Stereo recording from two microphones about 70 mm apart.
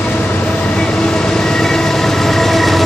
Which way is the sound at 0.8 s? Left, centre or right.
Centre.